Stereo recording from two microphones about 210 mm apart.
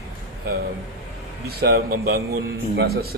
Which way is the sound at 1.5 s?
45° right (ahead or behind).